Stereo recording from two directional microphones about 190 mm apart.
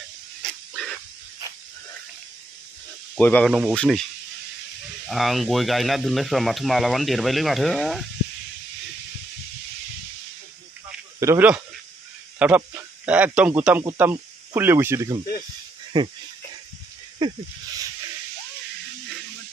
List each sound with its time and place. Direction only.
0.4 s a sound: 5° left (ahead or behind)
3.2 s speech: 10° left (ahead or behind)
5.0 s speech: centre (ahead or behind)
11.1 s a man's voice: 10° right (ahead or behind)
15.9 s speech: 25° right (ahead or behind)